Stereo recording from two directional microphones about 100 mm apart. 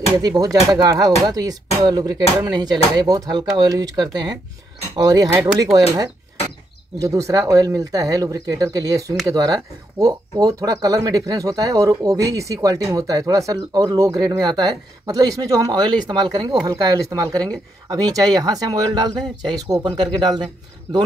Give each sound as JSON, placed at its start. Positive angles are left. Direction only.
{"t": 0.4, "sound": "speech", "side_deg": -35}
{"t": 7.0, "sound": "speech", "side_deg": -35}